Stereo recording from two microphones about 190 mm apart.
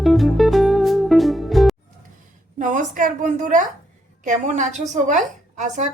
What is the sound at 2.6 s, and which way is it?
A woman's voice, 45° right (ahead or behind).